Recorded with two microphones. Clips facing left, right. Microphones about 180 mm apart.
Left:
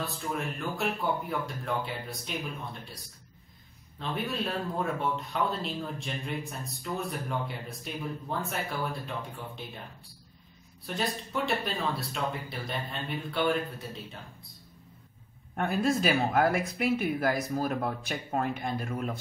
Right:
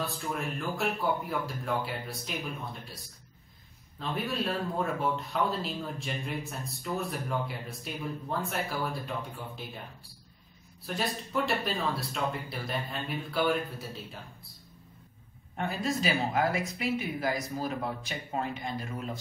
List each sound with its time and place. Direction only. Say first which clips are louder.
0.0 s speech: even; centre (ahead or behind)
4.0 s speech: even; centre (ahead or behind)
10.9 s speech: even; centre (ahead or behind)
15.5 s speech: left 4 dB; 55° left (ahead or behind)